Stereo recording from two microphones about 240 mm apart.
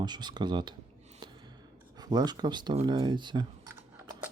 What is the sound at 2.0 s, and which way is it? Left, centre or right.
Speech, centre.